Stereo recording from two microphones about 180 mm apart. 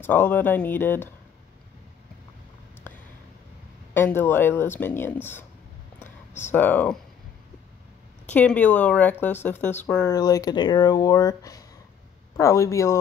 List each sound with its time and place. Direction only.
0.0 s speech: 10° left (ahead or behind)
3.9 s speech: 10° left (ahead or behind)
5.9 s a sound: 10° left (ahead or behind)
6.5 s speech: 10° left (ahead or behind)
8.3 s speech: 10° left (ahead or behind)
10.1 s speech: 20° left (ahead or behind)